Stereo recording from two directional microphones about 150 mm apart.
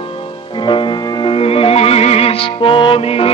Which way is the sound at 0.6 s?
35° left (ahead or behind).